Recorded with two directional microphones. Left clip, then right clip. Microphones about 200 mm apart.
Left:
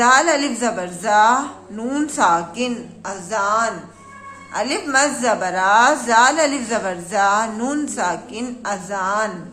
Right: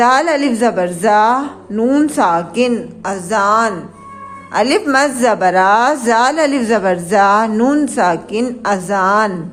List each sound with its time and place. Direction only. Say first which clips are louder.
0.0 s speech: right 3 dB; 30° right (ahead or behind)